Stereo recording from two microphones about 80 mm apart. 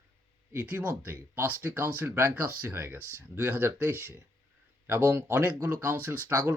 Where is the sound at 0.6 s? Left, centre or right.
Centre.